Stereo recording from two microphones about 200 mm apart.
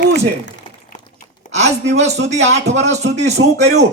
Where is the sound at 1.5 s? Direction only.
35° right (ahead or behind).